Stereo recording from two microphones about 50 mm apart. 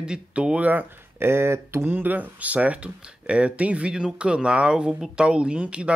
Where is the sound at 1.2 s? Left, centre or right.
Right.